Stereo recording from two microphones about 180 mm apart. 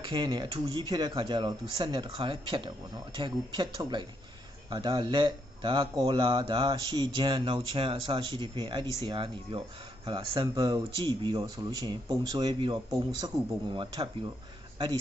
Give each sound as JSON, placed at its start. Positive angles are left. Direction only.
{"t": 0.0, "sound": "speech", "side_deg": -25}